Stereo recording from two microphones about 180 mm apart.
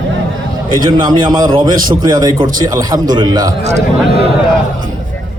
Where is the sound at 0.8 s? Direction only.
25° right (ahead or behind).